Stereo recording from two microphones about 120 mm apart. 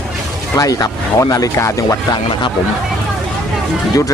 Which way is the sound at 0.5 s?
30° left (ahead or behind).